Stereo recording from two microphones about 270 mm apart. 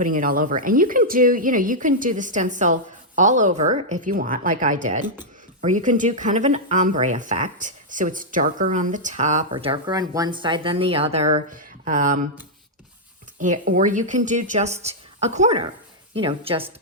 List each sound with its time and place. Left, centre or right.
0.0 s speech: right
13.4 s speech: right